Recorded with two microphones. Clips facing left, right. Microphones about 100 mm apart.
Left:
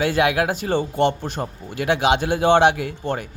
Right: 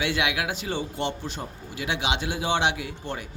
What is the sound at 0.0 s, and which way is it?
Speech, 45° left (ahead or behind).